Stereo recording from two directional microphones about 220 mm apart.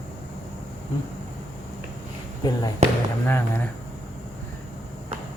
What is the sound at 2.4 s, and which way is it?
Speech, 20° left (ahead or behind).